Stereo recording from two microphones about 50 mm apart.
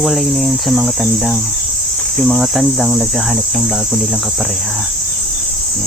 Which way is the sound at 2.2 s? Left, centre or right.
Centre.